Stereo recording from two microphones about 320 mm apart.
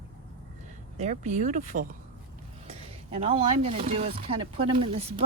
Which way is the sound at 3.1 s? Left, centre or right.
Centre.